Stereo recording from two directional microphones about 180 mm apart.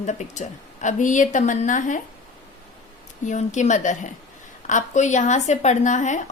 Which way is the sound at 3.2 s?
40° left (ahead or behind).